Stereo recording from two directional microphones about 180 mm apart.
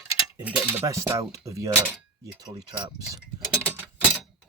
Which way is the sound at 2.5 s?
20° right (ahead or behind).